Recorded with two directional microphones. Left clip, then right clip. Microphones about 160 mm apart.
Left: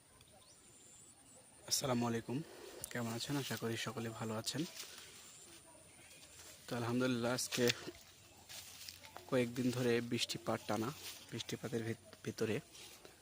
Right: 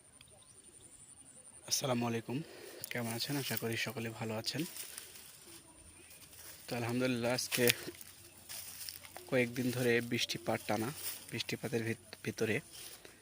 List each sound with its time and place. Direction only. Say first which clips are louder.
1.6 s speech: right 2 dB; 5° left (ahead or behind)
6.7 s speech: right 2 dB; 10° left (ahead or behind)
8.4 s a sound: right 4 dB; 90° right
9.1 s speech: right 3 dB; 5° left (ahead or behind)
11.5 s speech: right 4 dB; 10° right (ahead or behind)